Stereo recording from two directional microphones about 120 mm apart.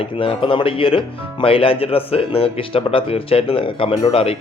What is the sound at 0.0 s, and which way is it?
Speech, 45° left (ahead or behind).